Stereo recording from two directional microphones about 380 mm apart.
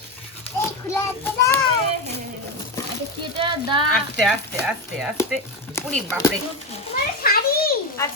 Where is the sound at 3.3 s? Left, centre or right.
Centre.